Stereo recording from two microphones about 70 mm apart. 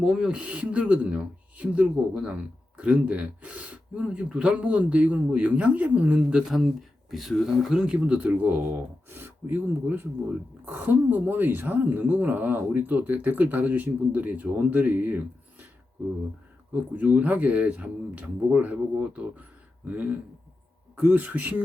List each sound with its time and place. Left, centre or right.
0.0 s a woman's voice: centre
7.1 s a woman's voice: centre; by 9.6 s right
10.7 s a woman's voice: right
16.7 s a woman's voice: right
20.9 s a woman's voice: right